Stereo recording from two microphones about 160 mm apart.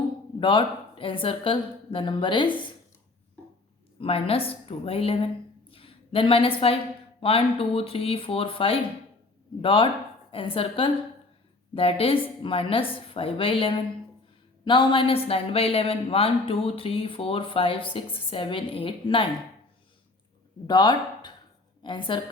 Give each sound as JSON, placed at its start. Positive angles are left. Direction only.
{"t": 0.3, "sound": "a woman's voice", "side_deg": 30}
{"t": 4.0, "sound": "a woman's voice", "side_deg": 35}
{"t": 5.7, "sound": "a sound", "side_deg": 35}
{"t": 7.2, "sound": "a woman's voice", "side_deg": 35}
{"t": 20.7, "sound": "a woman's voice", "side_deg": 30}